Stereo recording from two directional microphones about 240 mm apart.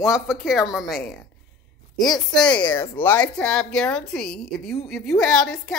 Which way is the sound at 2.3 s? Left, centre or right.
Centre.